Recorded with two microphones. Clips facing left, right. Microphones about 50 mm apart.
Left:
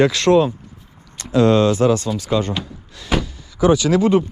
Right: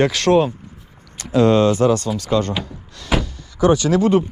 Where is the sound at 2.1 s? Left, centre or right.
Right.